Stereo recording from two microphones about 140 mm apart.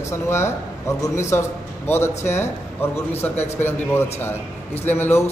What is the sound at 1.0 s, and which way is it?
A man's voice, 20° left (ahead or behind).